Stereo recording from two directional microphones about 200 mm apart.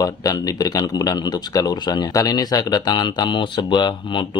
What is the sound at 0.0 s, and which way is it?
Speech, 20° left (ahead or behind).